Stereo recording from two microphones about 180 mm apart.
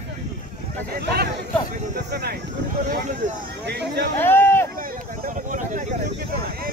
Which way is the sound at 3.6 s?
70° right (ahead or behind).